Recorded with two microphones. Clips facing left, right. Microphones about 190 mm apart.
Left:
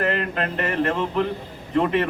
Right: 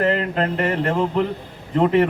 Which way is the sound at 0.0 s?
25° right (ahead or behind).